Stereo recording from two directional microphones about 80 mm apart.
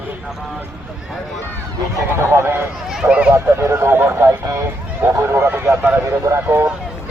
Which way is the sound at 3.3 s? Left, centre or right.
Right.